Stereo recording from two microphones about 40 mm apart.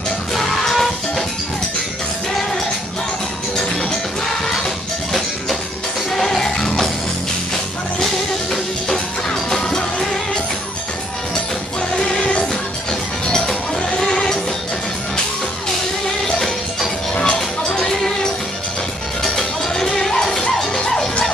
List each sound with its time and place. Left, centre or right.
0.3 s music: centre
6.1 s music: centre
8.0 s music: centre
8.9 s music: centre
12.0 s music: left
16.3 s music: centre
19.3 s music: centre